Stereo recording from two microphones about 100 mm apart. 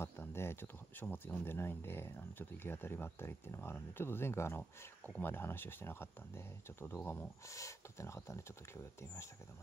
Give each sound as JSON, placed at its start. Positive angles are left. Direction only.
{"t": 0.0, "sound": "speech", "side_deg": 25}
{"t": 7.4, "sound": "speech", "side_deg": 30}